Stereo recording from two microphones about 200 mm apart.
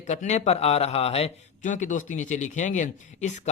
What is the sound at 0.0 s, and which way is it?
A man's voice, 35° left (ahead or behind).